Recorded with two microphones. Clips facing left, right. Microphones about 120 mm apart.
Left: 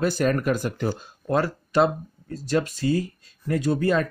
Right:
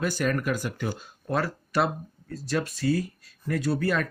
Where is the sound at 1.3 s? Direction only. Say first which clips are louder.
Left 5 dB; 20° left (ahead or behind).